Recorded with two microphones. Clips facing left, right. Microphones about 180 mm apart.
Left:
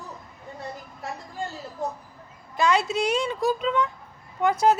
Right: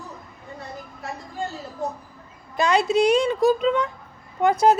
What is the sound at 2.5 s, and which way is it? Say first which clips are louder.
A woman's voice: right 3 dB; 15° right (ahead or behind).